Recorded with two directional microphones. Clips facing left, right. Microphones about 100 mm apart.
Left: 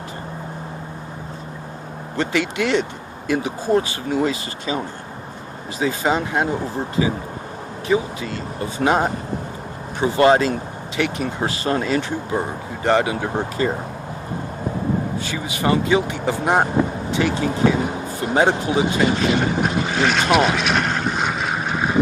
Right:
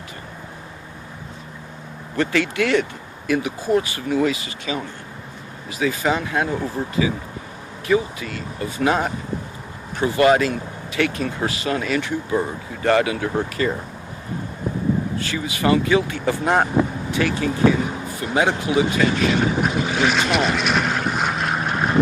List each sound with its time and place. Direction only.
2.1 s speech: 20° left (ahead or behind)
5.8 s speech: 25° left (ahead or behind)
15.2 s speech: 20° left (ahead or behind)
18.2 s speech: 35° left (ahead or behind)
19.6 s vehicle: 5° right (ahead or behind)